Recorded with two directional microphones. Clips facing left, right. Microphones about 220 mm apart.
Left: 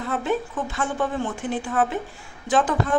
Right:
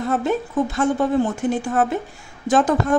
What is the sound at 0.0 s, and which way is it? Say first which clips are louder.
A woman's voice: right 4 dB; 40° right (ahead or behind).